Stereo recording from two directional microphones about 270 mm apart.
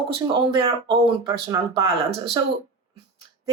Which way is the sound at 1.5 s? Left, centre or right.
Centre.